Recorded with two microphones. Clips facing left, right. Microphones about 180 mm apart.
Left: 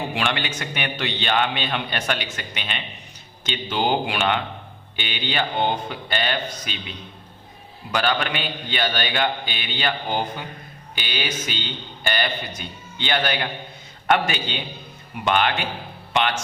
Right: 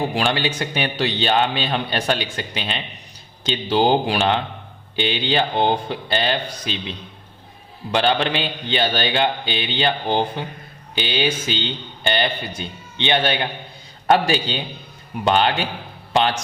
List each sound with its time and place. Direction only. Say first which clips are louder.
0.1 s a man's voice: right 4 dB; 35° right (ahead or behind)